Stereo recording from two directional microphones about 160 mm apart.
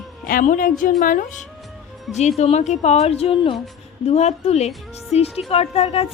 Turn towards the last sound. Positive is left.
turn(degrees=40)  # may be behind; listen again after turning